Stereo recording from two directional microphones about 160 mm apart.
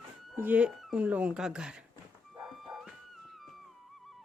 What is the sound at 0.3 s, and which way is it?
Speech, 10° right (ahead or behind).